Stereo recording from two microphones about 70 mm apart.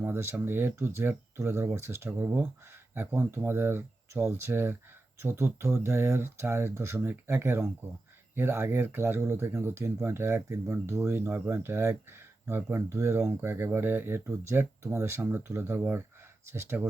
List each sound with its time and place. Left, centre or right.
0.0 s speech: right
11.2 s speech: right